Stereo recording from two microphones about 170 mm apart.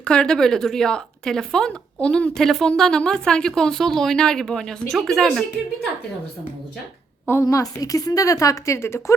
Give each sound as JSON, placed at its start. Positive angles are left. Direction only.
{"t": 0.0, "sound": "speech", "side_deg": 5}
{"t": 7.3, "sound": "a woman's voice", "side_deg": 15}